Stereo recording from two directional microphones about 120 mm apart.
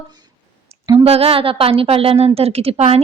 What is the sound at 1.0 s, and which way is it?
A woman's voice, 55° right (ahead or behind).